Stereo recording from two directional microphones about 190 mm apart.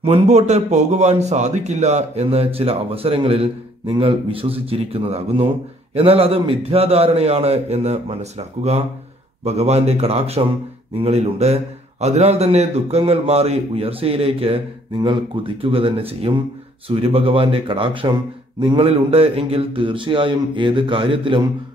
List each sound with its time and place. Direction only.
0.0 s a man's voice: 35° right (ahead or behind)